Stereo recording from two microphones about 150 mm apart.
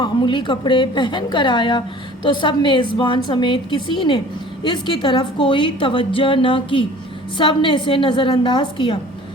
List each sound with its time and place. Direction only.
0.0 s a woman's voice: 30° left (ahead or behind)